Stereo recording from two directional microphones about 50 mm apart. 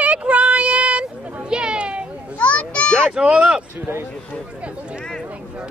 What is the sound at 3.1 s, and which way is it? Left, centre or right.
Speech, right.